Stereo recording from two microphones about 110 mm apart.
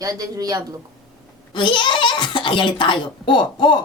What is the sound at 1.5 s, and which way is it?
A child's voice, 45° left (ahead or behind).